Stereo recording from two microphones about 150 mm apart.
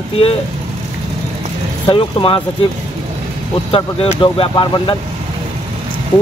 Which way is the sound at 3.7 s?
40° left (ahead or behind).